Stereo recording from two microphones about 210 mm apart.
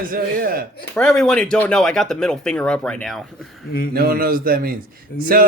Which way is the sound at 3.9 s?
45° right (ahead or behind).